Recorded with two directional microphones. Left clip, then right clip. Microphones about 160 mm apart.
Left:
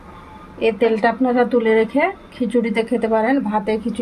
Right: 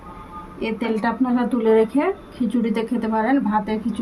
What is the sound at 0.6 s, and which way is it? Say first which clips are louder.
A woman's voice: left 8 dB; 25° left (ahead or behind).